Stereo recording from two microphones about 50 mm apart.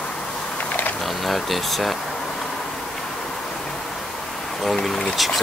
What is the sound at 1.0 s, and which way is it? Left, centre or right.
Speech, centre.